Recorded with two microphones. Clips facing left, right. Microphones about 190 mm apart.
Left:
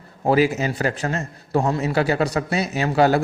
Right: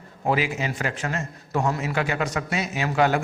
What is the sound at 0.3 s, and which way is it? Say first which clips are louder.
Speech: left 6 dB; 40° left (ahead or behind).